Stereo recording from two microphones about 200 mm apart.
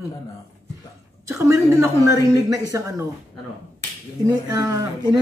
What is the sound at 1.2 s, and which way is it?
Speech, 15° right (ahead or behind).